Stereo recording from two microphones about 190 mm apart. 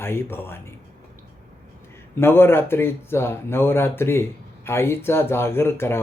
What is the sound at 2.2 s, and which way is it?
Speech, 10° left (ahead or behind).